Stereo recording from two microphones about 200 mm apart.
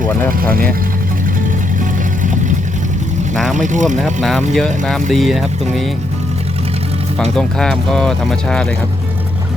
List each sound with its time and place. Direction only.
3.5 s speech: 40° right (ahead or behind)
3.8 s speech: centre (ahead or behind)
7.3 s speech: 5° left (ahead or behind)